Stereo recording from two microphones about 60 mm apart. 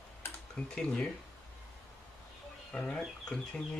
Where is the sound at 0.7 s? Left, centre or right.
Centre.